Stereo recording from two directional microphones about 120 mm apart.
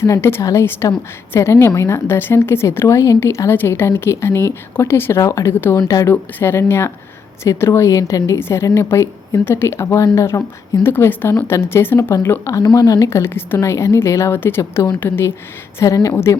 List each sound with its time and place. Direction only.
0.0 s speech: 20° left (ahead or behind)
12.6 s speech: 35° left (ahead or behind)
13.1 s speech: 20° left (ahead or behind)